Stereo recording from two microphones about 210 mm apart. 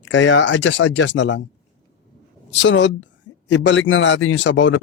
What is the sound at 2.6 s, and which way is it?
Speech, 60° left (ahead or behind).